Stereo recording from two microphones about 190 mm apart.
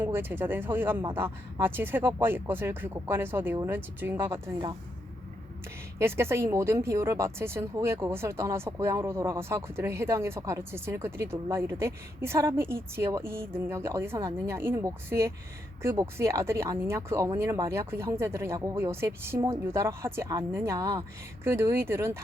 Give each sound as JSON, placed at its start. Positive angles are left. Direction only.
{"t": 0.0, "sound": "speech", "side_deg": -10}
{"t": 6.0, "sound": "speech", "side_deg": -15}